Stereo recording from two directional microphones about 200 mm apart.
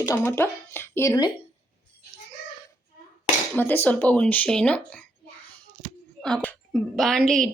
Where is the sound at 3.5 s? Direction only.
10° left (ahead or behind).